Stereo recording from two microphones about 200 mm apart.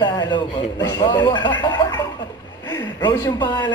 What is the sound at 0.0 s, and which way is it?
A man's voice, 20° left (ahead or behind).